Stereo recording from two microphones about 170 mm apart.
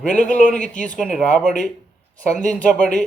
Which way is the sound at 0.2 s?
50° left (ahead or behind).